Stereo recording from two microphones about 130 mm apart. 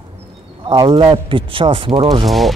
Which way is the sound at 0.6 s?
35° right (ahead or behind).